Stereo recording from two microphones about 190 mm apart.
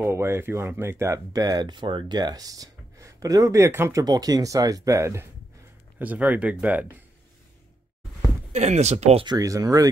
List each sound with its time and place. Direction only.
0.0 s speech: 15° right (ahead or behind)
8.5 s speech: 35° right (ahead or behind)
9.2 s speech: 20° right (ahead or behind)